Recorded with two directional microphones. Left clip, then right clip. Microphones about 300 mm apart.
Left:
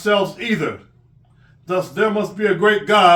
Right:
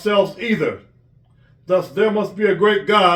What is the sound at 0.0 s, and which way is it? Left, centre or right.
Speech, centre.